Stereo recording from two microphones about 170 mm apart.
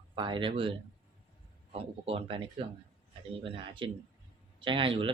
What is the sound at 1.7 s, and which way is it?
Speech, 35° right (ahead or behind).